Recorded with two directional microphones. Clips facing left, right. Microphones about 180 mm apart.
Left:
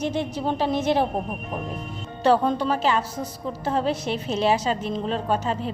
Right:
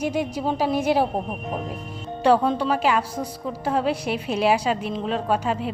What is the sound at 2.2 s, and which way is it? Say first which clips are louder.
A woman's voice: right 1 dB; 10° right (ahead or behind).